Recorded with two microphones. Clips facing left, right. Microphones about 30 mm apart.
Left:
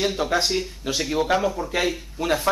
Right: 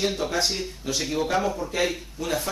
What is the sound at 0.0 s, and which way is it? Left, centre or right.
Speech, centre.